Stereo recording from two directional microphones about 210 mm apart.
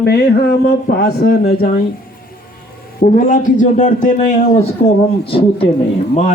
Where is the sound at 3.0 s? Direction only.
40° left (ahead or behind).